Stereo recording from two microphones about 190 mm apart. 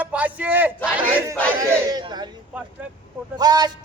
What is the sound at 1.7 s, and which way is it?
Crowd, 20° right (ahead or behind).